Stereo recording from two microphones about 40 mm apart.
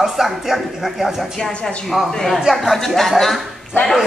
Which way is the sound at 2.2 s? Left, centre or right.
Centre.